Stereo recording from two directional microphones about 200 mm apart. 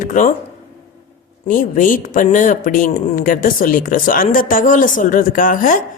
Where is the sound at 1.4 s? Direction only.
40° left (ahead or behind).